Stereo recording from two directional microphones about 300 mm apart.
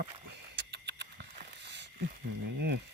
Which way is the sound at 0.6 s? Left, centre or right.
Right.